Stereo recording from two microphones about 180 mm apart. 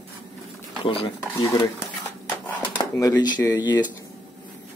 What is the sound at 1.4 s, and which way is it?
Speech, 20° left (ahead or behind).